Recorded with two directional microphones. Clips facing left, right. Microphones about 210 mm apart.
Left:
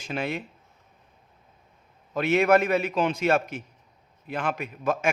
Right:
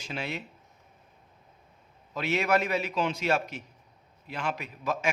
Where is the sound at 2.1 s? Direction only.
55° left (ahead or behind).